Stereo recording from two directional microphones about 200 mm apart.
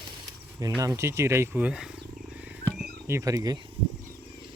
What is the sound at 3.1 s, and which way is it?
Speech, 15° right (ahead or behind).